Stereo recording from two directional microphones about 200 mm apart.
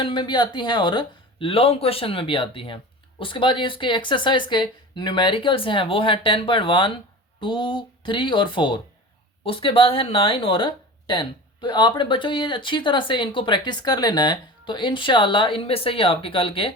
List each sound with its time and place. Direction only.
0.0 s speech: 25° left (ahead or behind)